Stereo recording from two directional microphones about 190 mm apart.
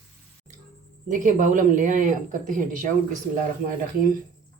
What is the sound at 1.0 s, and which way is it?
A woman's voice, 40° right (ahead or behind).